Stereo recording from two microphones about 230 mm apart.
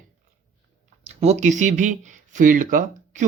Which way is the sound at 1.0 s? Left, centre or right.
Right.